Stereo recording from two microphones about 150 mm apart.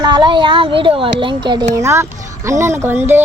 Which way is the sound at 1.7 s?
20° right (ahead or behind).